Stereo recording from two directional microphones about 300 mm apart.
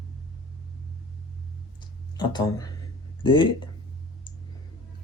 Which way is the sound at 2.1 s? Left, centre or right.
Centre.